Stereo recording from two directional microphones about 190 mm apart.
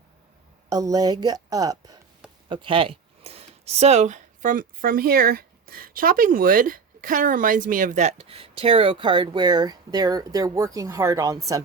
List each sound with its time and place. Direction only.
0.7 s speech: 20° right (ahead or behind)